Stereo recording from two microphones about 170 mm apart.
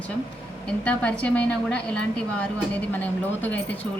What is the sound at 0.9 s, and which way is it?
A woman's voice, 5° left (ahead or behind).